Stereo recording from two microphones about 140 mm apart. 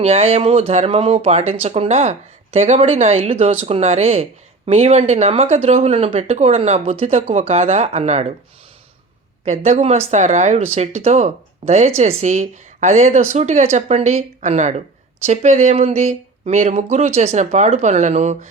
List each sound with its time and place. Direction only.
0.0 s speech: 50° right (ahead or behind)
9.4 s speech: 55° right (ahead or behind)